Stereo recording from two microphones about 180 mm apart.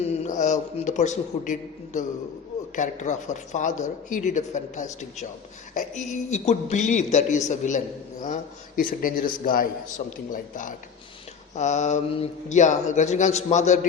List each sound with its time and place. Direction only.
0.0 s a man's voice: 35° left (ahead or behind)